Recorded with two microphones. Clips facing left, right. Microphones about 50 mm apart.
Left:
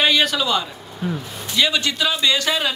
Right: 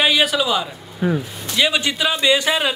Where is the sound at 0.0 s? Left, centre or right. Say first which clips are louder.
Right 1 dB; centre.